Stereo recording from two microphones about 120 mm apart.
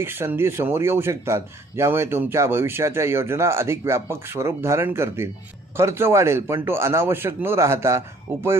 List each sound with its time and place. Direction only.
0.0 s a man's voice: 20° right (ahead or behind)